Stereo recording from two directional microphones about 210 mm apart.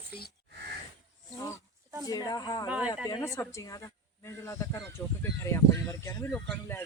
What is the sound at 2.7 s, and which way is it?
Speech, 5° right (ahead or behind).